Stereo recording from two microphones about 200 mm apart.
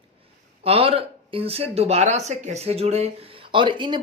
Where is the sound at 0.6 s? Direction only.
30° right (ahead or behind).